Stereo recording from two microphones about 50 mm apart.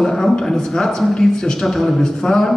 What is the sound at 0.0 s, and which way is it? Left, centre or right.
A man's voice, centre.